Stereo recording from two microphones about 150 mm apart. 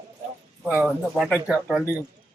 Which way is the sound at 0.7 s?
5° right (ahead or behind).